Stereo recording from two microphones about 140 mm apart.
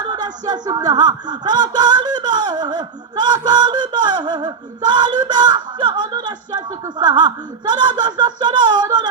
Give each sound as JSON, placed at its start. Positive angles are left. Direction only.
{"t": 0.0, "sound": "speech", "side_deg": -30}